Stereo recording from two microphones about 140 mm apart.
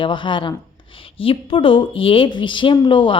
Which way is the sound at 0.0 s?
35° left (ahead or behind).